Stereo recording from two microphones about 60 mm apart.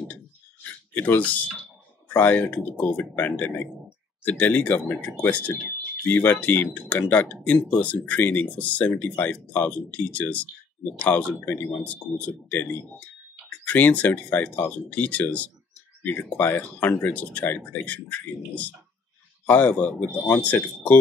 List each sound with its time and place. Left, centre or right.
0.9 s speech: left
11.4 s speech: left
11.8 s speech: left
13.7 s speech: left
19.4 s speech: left